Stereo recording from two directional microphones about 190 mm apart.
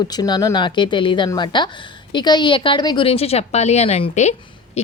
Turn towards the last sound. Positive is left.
turn(degrees=35)  # may be behind; listen again after turning